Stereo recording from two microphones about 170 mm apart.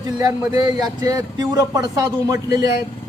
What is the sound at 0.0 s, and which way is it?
A man's voice, 20° right (ahead or behind).